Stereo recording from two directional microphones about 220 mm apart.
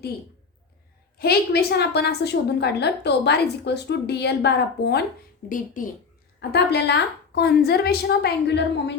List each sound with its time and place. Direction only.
1.2 s a woman's voice: 45° left (ahead or behind)
5.5 s a woman's voice: 35° left (ahead or behind)
6.5 s a woman's voice: 50° left (ahead or behind)